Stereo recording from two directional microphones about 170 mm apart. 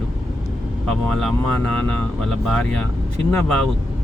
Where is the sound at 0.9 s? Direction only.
5° left (ahead or behind).